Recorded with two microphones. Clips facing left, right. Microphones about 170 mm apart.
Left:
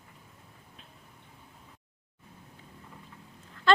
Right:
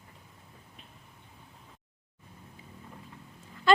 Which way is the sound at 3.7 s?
10° right (ahead or behind).